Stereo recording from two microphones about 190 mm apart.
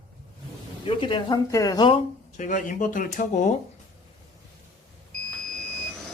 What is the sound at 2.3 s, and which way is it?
Speech, 40° left (ahead or behind).